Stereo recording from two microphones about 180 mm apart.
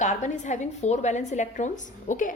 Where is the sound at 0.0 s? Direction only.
40° left (ahead or behind).